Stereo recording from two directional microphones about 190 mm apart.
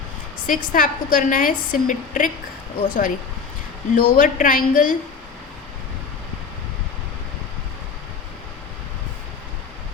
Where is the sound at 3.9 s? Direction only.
45° left (ahead or behind).